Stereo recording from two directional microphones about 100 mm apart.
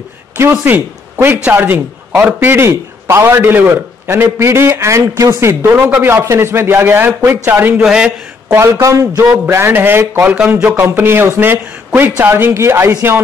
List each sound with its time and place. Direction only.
0.4 s a man's voice: 25° right (ahead or behind)
7.8 s a man's voice: 10° right (ahead or behind)
8.5 s a man's voice: 20° right (ahead or behind)
8.8 s a man's voice: 35° right (ahead or behind)